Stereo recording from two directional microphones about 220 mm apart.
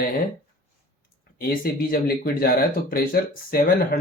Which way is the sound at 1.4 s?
40° left (ahead or behind).